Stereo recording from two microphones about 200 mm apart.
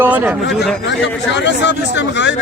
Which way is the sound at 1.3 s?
60° left (ahead or behind).